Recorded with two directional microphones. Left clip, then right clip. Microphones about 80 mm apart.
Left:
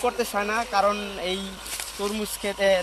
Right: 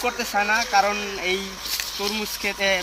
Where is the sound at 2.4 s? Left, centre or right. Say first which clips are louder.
Left 1 dB; left.